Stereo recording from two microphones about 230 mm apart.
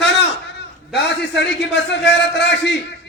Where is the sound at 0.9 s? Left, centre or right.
Left.